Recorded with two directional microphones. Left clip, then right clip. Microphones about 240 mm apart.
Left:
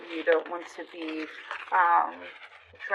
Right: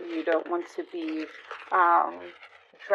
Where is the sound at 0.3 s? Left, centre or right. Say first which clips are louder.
Left 2 dB; right.